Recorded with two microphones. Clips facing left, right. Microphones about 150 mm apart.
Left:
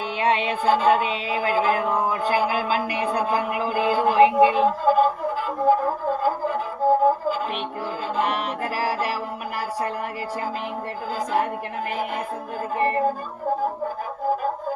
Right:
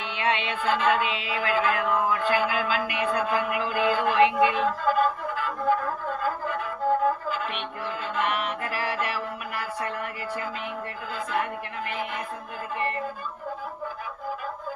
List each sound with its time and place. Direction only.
0.2 s music: 40° left (ahead or behind)
12.7 s music: 40° left (ahead or behind)